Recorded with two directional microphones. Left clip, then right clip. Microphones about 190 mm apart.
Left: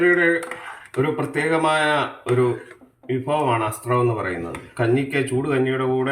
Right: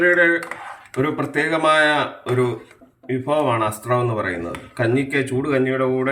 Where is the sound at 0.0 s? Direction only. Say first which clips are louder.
Right 2 dB; 15° right (ahead or behind).